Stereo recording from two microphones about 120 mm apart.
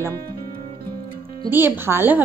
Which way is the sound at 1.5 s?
15° right (ahead or behind).